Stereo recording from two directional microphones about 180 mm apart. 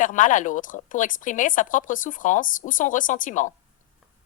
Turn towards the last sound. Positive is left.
turn(degrees=45)  # may be behind; listen again after turning